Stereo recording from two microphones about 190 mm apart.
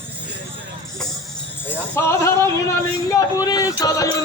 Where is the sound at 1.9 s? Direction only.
15° left (ahead or behind).